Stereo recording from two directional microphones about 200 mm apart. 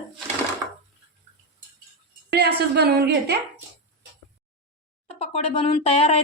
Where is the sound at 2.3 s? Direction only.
55° right (ahead or behind).